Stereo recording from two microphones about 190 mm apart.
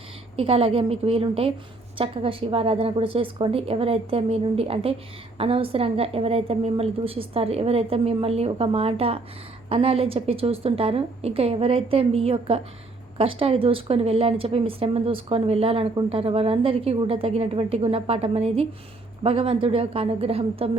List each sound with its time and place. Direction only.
0.3 s a woman's voice: 30° right (ahead or behind)